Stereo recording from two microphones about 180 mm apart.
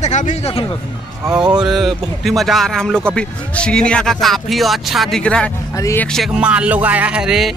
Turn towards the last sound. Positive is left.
turn(degrees=-5)  # may be behind; listen again after turning